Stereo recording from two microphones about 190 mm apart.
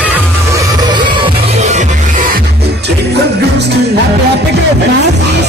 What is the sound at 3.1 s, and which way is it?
Music, 60° right (ahead or behind).